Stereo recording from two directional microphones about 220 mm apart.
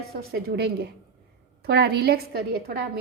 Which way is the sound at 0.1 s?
45° right (ahead or behind).